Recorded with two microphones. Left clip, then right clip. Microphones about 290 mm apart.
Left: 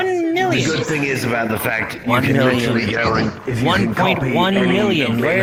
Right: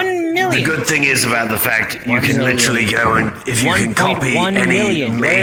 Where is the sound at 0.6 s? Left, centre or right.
Right.